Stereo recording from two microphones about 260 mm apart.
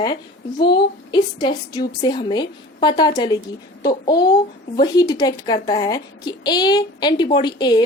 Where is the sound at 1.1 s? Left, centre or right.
Centre.